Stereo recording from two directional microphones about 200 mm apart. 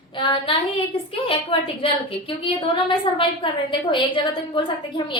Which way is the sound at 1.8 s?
25° left (ahead or behind).